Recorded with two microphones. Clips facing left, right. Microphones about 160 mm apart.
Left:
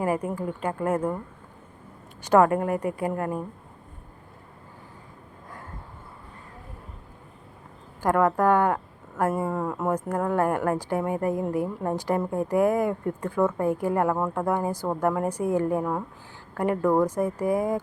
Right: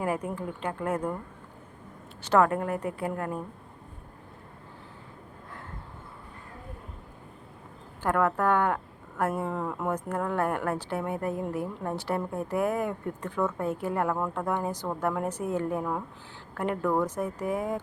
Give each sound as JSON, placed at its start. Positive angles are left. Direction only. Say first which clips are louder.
{"t": 0.3, "sound": "speech", "louder": "left 4 dB", "side_deg": 5}
{"t": 2.2, "sound": "speech", "louder": "left 4 dB", "side_deg": 10}
{"t": 8.0, "sound": "speech", "louder": "left 4 dB", "side_deg": 10}